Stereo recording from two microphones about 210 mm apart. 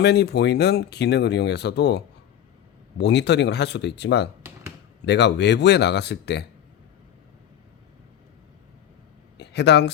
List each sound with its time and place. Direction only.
0.0 s speech: 50° left (ahead or behind)
9.4 s speech: 55° left (ahead or behind)